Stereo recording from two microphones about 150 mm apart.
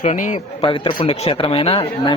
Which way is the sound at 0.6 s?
35° left (ahead or behind).